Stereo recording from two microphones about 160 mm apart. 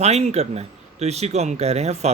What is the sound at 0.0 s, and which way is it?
Speech, 45° right (ahead or behind).